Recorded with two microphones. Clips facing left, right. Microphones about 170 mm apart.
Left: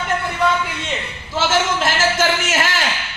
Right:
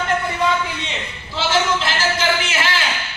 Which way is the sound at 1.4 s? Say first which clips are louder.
Left 1 dB; 45° left (ahead or behind).